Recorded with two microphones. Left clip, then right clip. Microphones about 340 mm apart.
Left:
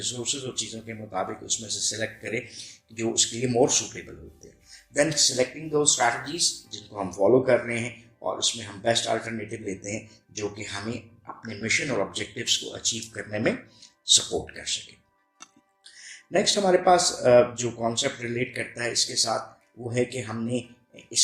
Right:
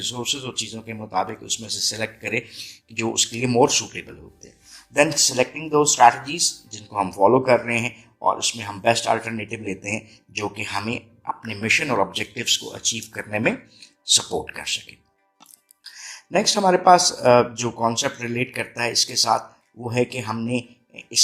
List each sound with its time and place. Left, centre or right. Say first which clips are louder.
0.0 s speech: right 5 dB; right
16.3 s speech: right 3 dB; right